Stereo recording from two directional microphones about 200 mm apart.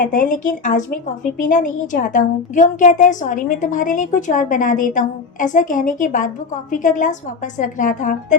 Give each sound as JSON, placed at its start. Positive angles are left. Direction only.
{"t": 0.0, "sound": "a woman's voice", "side_deg": 40}